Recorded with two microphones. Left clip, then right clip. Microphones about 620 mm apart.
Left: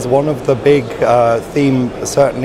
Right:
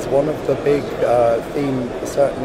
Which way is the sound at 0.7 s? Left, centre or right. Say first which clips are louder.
Left 6 dB; left.